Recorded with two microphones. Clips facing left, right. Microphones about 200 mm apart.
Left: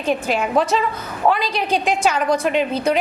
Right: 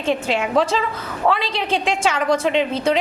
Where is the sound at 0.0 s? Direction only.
25° right (ahead or behind).